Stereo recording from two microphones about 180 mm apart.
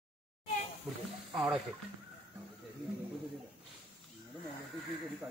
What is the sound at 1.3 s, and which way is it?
Speech, 5° right (ahead or behind).